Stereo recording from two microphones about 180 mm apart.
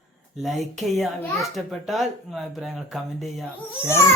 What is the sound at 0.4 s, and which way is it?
A child's voice, centre (ahead or behind).